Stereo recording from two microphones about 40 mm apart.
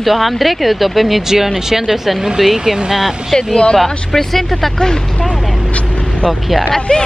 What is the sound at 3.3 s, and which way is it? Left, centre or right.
Speech, centre.